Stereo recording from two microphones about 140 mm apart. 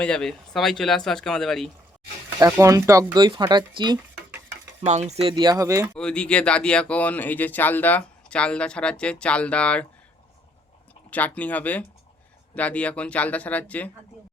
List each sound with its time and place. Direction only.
0.0 s speech: 5° left (ahead or behind)
2.4 s speech: 20° right (ahead or behind)
4.9 s speech: 55° right (ahead or behind)
5.3 s speech: 30° right (ahead or behind)
5.9 s speech: 5° left (ahead or behind)
11.1 s speech: 10° left (ahead or behind)